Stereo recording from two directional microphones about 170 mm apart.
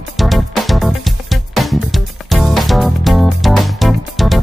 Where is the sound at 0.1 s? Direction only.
Centre (ahead or behind).